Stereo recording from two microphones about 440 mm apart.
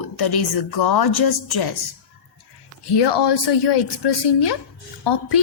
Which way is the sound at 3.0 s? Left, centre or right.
Left.